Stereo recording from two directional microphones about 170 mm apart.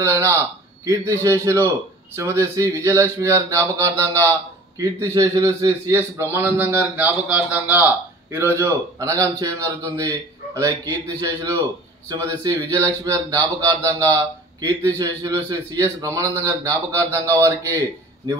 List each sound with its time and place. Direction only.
0.0 s a man's voice: 15° right (ahead or behind)